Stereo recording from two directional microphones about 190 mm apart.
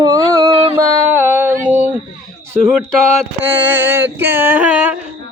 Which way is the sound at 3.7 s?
10° right (ahead or behind).